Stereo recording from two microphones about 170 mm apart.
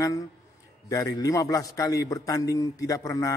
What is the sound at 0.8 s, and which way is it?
A man's voice, 20° left (ahead or behind).